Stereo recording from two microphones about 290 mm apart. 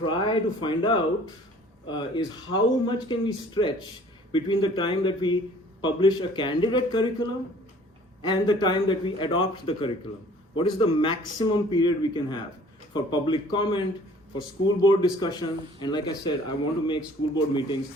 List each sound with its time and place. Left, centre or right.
0.0 s speech: centre
8.2 s speech: centre